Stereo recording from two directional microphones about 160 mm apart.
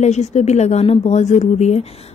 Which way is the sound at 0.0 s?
45° left (ahead or behind).